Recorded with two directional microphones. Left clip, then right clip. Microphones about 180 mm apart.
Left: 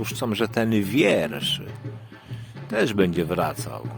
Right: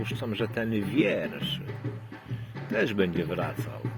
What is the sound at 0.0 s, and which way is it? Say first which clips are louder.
Speech: left 6 dB; 40° left (ahead or behind).